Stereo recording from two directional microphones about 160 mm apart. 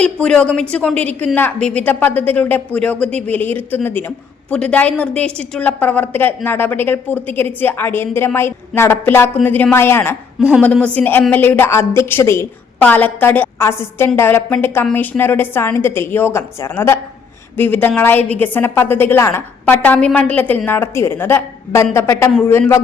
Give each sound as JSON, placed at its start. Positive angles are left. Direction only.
{"t": 0.0, "sound": "a woman's voice", "side_deg": 5}